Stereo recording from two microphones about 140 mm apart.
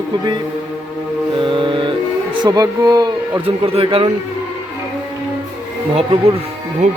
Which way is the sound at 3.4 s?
45° right (ahead or behind).